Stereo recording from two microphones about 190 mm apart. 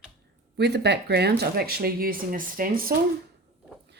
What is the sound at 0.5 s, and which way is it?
Speech, 60° right (ahead or behind).